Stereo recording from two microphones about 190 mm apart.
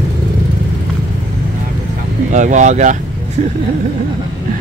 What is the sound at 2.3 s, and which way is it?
Speech, 40° right (ahead or behind).